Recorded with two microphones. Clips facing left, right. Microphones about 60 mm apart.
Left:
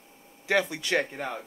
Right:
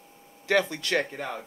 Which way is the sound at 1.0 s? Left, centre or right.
Centre.